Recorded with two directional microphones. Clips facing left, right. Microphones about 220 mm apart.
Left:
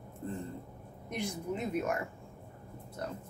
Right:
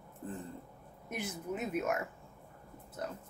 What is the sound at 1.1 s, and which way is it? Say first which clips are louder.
Speech: left 3 dB; 5° right (ahead or behind).